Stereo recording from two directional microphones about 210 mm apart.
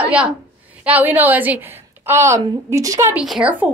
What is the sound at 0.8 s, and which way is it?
A woman's voice, 10° right (ahead or behind).